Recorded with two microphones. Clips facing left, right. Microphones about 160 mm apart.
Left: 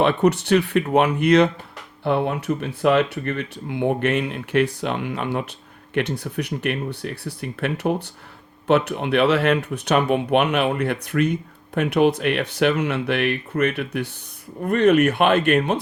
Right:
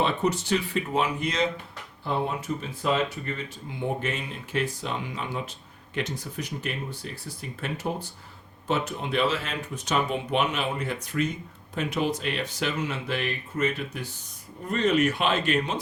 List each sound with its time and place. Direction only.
0.0 s speech: 65° left (ahead or behind)